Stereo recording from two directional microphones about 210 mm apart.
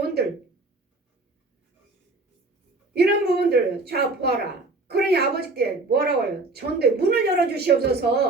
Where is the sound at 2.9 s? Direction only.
50° right (ahead or behind).